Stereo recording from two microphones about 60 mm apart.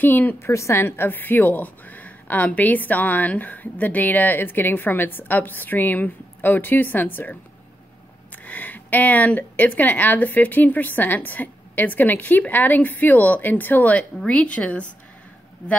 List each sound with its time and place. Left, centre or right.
0.0 s a woman's voice: left
0.4 s a woman's voice: left
8.5 s a woman's voice: left